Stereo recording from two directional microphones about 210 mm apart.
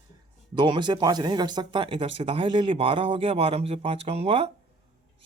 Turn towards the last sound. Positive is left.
turn(degrees=-25)  # may be behind; listen again after turning